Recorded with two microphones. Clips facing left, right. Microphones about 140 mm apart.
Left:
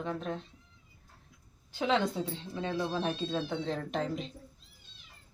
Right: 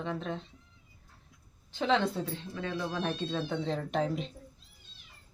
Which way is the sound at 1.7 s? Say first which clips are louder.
Right 1 dB; 10° left (ahead or behind).